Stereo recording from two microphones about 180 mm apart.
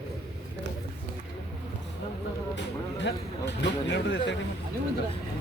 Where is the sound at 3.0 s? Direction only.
75° left (ahead or behind).